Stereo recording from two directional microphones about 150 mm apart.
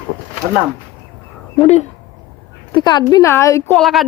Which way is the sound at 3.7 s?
Centre (ahead or behind).